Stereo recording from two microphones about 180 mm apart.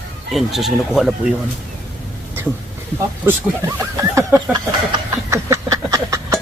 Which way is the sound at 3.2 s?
15° right (ahead or behind).